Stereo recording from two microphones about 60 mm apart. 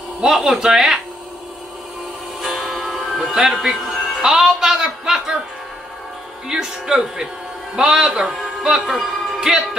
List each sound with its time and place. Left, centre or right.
0.2 s speech: centre
2.4 s music: centre
6.4 s speech: centre